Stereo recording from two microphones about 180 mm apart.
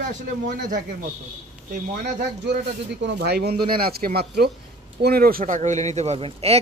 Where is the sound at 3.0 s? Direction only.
70° right (ahead or behind); by 5.6 s 55° right (ahead or behind).